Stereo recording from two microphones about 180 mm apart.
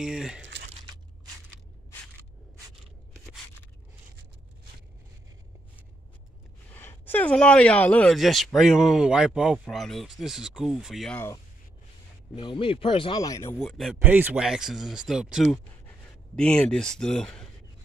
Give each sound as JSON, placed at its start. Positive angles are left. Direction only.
{"t": 0.0, "sound": "speech", "side_deg": -5}
{"t": 6.7, "sound": "speech", "side_deg": 10}
{"t": 12.4, "sound": "speech", "side_deg": 30}
{"t": 13.6, "sound": "speech", "side_deg": 0}